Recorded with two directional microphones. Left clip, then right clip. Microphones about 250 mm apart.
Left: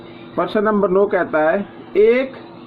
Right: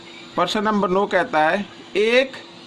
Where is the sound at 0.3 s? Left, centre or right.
Right.